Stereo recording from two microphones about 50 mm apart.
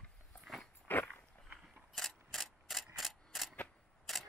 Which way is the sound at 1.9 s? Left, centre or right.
Centre.